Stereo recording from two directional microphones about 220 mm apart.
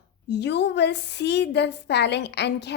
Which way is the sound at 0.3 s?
50° left (ahead or behind).